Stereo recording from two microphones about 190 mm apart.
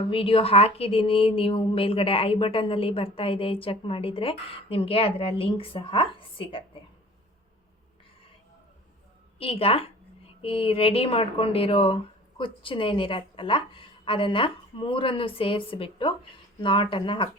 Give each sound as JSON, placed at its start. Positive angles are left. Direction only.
{"t": 0.0, "sound": "a woman's voice", "side_deg": 25}
{"t": 9.4, "sound": "a woman's voice", "side_deg": 30}